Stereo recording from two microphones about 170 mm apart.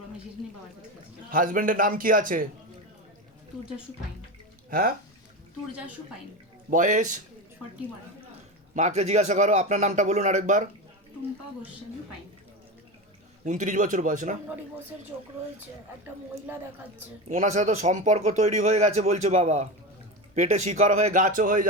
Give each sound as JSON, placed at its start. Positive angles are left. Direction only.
{"t": 1.3, "sound": "speech", "side_deg": -55}
{"t": 4.7, "sound": "speech", "side_deg": -55}
{"t": 6.7, "sound": "speech", "side_deg": -50}
{"t": 8.7, "sound": "speech", "side_deg": -40}
{"t": 13.4, "sound": "speech", "side_deg": -45}
{"t": 17.2, "sound": "speech", "side_deg": -45}